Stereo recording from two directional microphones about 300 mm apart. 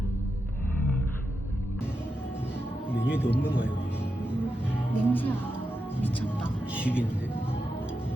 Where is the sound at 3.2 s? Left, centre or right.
Centre.